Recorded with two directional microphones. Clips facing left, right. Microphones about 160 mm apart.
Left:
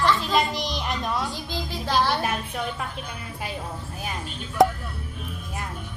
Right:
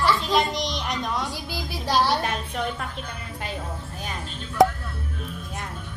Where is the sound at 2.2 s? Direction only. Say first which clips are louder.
Even; 5° left (ahead or behind).